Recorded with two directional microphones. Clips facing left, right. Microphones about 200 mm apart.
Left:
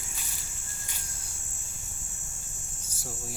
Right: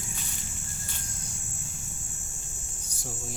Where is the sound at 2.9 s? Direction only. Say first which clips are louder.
Right 1 dB; 5° left (ahead or behind).